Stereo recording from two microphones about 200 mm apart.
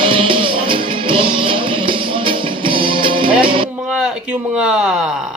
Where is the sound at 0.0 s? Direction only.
25° right (ahead or behind).